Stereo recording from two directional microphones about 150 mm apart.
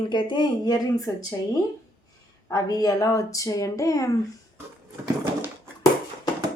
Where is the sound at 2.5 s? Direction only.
25° left (ahead or behind).